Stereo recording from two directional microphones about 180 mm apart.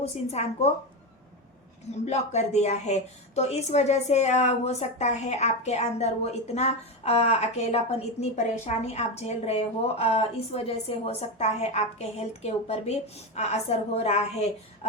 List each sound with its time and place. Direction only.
0.0 s a woman's voice: 35° left (ahead or behind)
2.0 s a woman's voice: 40° left (ahead or behind)